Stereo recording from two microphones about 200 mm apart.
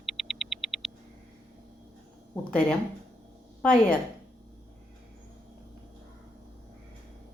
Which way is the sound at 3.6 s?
5° left (ahead or behind).